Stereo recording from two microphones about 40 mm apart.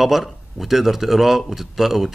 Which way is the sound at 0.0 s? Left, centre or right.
Centre.